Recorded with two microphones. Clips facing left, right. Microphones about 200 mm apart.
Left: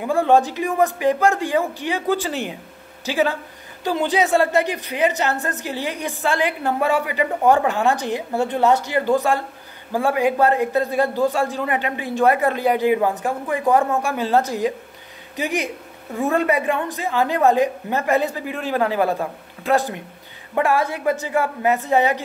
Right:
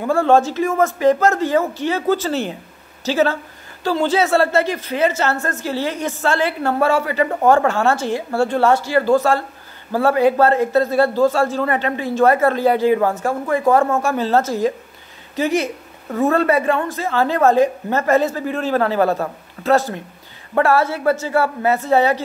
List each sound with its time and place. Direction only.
0.0 s speech: 15° left (ahead or behind)